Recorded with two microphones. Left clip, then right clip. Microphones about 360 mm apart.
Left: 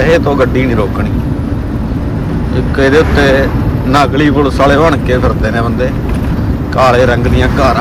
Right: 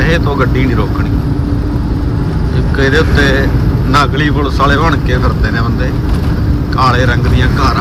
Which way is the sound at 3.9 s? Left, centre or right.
Left.